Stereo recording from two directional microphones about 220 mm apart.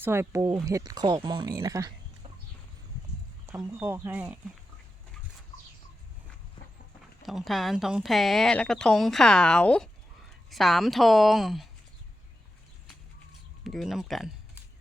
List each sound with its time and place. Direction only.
0.0 s speech: 10° right (ahead or behind)
3.4 s speech: 10° right (ahead or behind)
6.6 s a sound: 20° left (ahead or behind)
7.2 s speech: centre (ahead or behind)
13.7 s speech: centre (ahead or behind)